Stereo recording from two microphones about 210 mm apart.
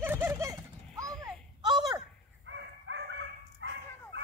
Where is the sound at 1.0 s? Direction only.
Centre (ahead or behind).